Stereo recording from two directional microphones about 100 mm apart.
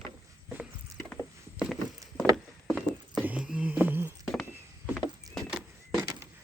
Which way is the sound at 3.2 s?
10° right (ahead or behind).